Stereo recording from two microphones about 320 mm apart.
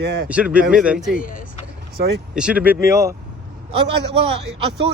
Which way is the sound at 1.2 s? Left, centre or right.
Left.